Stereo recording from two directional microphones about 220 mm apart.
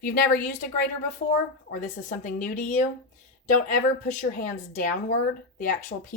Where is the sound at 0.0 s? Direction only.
40° left (ahead or behind).